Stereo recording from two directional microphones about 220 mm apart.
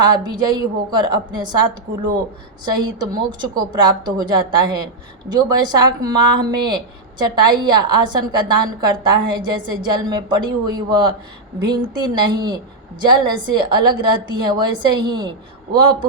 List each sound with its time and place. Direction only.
0.0 s a woman's voice: 20° right (ahead or behind)